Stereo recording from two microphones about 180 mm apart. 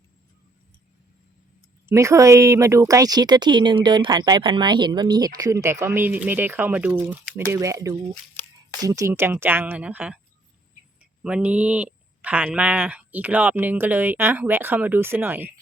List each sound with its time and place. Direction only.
1.9 s speech: 15° right (ahead or behind)
11.2 s speech: 5° right (ahead or behind)